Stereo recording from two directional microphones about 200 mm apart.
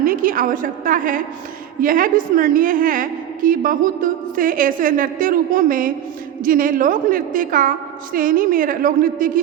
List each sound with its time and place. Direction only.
0.0 s a woman's voice: 45° right (ahead or behind)